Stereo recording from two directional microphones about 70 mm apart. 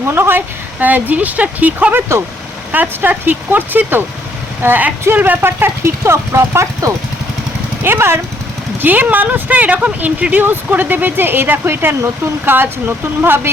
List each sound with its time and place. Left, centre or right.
0.1 s speech: right
8.8 s speech: right